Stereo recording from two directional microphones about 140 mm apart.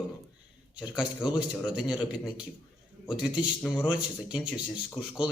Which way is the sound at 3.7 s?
5° right (ahead or behind).